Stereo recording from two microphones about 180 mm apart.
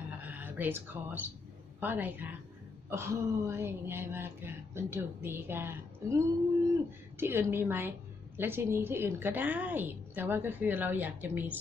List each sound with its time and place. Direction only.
0.2 s speech: 10° right (ahead or behind)